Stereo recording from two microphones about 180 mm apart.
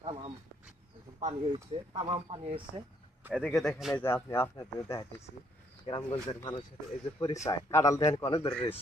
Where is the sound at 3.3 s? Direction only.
5° left (ahead or behind).